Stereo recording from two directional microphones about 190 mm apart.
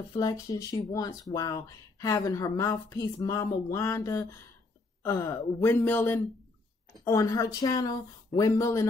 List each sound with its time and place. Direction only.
0.1 s a woman's voice: 20° left (ahead or behind)